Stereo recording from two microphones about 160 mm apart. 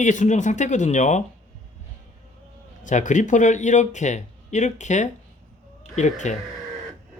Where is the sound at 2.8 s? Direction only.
50° left (ahead or behind).